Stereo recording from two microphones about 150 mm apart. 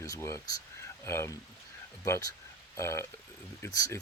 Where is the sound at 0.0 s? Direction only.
20° left (ahead or behind).